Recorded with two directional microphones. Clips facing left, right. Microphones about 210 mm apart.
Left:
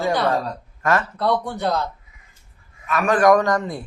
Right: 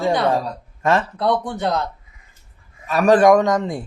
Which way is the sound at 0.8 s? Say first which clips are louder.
Right 2 dB; 25° right (ahead or behind).